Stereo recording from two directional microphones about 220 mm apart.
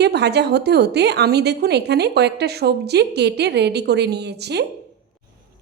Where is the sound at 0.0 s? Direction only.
50° right (ahead or behind).